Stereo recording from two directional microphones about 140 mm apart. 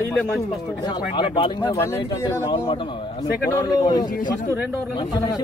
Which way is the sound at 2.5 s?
40° left (ahead or behind).